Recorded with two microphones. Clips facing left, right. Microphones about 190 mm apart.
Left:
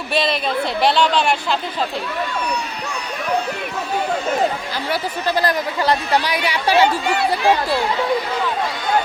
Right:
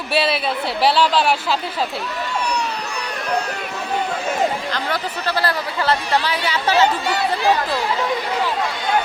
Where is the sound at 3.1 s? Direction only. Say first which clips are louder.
Left 2 dB; 70° right (ahead or behind).